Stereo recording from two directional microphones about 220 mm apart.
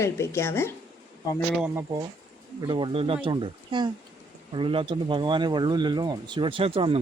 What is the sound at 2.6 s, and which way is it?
Speech, 20° right (ahead or behind).